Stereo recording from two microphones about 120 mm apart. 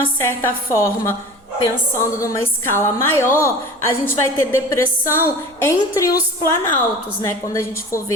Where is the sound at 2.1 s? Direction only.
25° left (ahead or behind).